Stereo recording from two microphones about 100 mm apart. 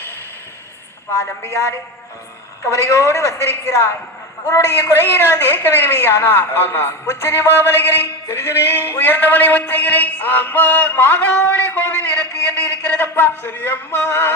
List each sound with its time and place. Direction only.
1.2 s a woman's voice: 25° left (ahead or behind)
2.7 s a woman's voice: 30° left (ahead or behind)